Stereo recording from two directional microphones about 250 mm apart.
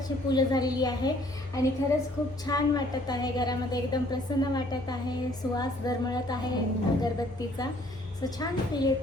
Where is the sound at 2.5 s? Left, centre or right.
Centre.